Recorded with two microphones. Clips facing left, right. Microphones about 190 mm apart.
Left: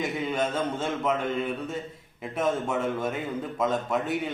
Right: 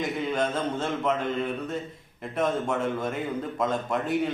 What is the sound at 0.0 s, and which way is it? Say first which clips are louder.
A man's voice: right 1 dB; 5° left (ahead or behind).